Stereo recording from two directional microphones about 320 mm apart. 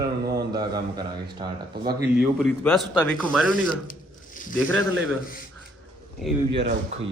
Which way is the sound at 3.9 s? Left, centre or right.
Left.